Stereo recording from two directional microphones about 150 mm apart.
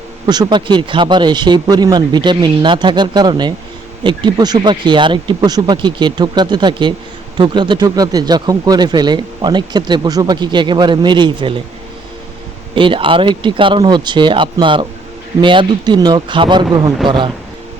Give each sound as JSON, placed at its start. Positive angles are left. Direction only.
{"t": 0.3, "sound": "speech", "side_deg": -30}
{"t": 12.7, "sound": "speech", "side_deg": -35}